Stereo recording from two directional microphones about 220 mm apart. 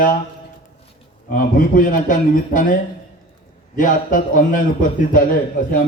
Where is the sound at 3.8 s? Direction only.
40° left (ahead or behind).